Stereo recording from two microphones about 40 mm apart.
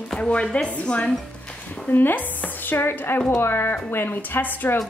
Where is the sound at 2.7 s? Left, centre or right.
Left.